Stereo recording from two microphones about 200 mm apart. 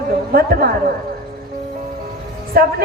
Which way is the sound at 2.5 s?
50° right (ahead or behind).